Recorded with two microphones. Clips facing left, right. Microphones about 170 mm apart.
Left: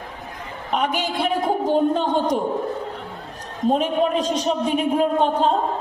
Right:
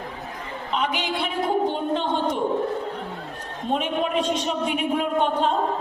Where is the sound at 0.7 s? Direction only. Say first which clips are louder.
Left 3 dB; 50° left (ahead or behind).